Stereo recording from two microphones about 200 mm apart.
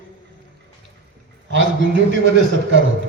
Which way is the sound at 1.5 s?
70° right (ahead or behind).